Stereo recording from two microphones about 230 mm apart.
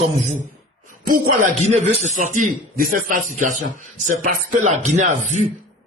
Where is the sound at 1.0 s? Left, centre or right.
Right.